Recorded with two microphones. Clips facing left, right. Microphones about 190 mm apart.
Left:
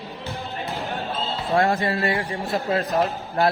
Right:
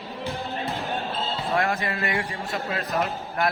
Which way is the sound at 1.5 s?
30° left (ahead or behind).